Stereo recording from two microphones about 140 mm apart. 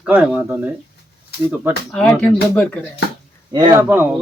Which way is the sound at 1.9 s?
10° left (ahead or behind).